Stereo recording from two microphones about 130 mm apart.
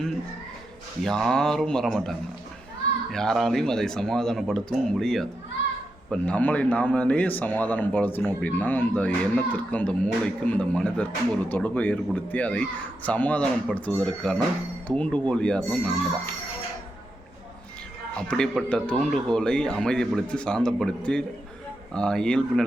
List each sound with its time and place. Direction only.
1.0 s speech: 5° left (ahead or behind)
3.1 s a man's voice: 5° left (ahead or behind)
18.2 s a man's voice: 5° left (ahead or behind)